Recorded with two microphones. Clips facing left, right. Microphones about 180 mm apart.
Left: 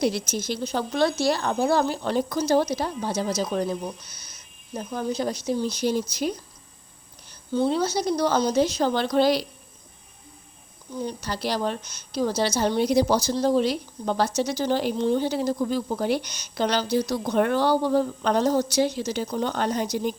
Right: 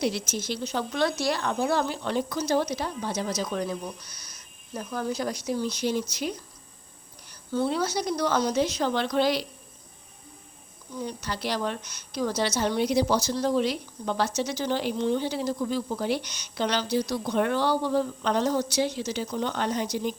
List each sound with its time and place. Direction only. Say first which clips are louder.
0.0 s a woman's voice: left 3 dB; 40° left (ahead or behind)
7.3 s a woman's voice: left 3 dB; 25° left (ahead or behind)
11.0 s a woman's voice: left 3 dB; 35° left (ahead or behind)